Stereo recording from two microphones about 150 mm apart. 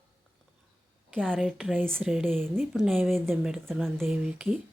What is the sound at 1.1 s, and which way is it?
Speech, 5° left (ahead or behind).